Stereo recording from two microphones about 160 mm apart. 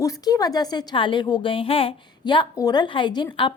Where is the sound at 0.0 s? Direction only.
25° left (ahead or behind).